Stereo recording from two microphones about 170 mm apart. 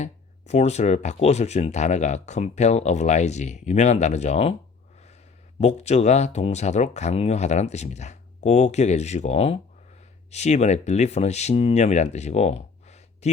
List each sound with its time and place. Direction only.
0.0 s speech: 40° left (ahead or behind)
5.5 s speech: 40° left (ahead or behind)